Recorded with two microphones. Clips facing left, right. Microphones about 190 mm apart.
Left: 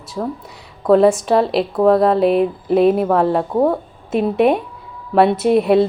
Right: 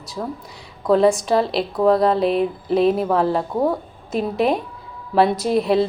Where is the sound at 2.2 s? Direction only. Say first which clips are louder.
Left 4 dB; centre (ahead or behind).